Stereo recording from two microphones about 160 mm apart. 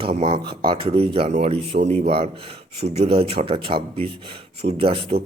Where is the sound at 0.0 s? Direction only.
40° right (ahead or behind).